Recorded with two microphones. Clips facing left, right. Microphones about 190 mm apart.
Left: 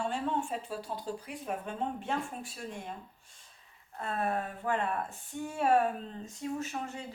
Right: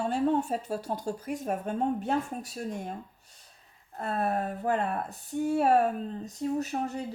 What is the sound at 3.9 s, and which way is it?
Speech, 40° right (ahead or behind).